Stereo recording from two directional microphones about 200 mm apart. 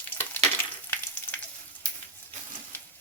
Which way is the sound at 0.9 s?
10° left (ahead or behind).